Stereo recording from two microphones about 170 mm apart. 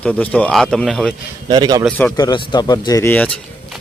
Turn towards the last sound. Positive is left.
turn(degrees=10)  # may be behind; listen again after turning